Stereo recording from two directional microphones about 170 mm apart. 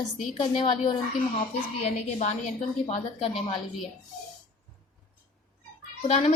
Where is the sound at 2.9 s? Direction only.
35° left (ahead or behind).